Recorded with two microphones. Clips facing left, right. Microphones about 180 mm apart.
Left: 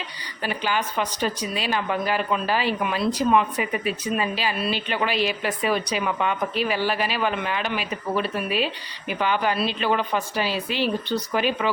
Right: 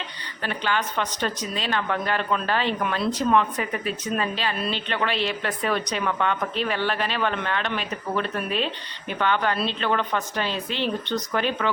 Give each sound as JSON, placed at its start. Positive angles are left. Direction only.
{"t": 0.4, "sound": "speech", "side_deg": 10}